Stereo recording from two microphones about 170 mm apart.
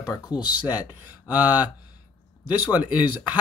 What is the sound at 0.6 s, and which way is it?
Speech, 10° right (ahead or behind).